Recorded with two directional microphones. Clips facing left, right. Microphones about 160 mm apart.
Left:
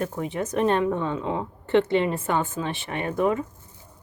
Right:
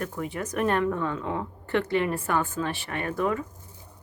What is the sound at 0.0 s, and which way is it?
Speech, 20° left (ahead or behind).